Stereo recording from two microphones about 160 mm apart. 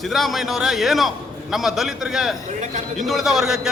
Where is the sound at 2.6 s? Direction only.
50° right (ahead or behind).